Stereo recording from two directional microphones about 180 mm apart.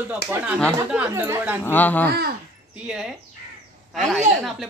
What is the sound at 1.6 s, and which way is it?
Speech, 10° left (ahead or behind).